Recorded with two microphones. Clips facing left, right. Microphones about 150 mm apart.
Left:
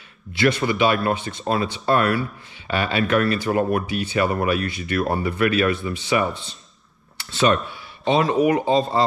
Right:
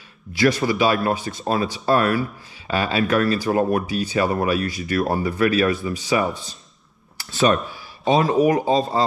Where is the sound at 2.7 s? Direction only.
35° right (ahead or behind).